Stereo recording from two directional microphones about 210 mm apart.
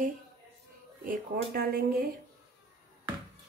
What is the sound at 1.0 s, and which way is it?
Speech, 45° right (ahead or behind).